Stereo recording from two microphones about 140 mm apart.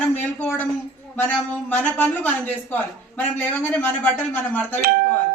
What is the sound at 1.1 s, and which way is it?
A man's voice, 10° left (ahead or behind).